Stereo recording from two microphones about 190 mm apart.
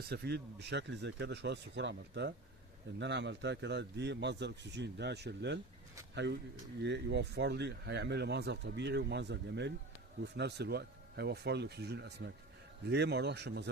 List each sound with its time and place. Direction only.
0.0 s speech: 55° right (ahead or behind)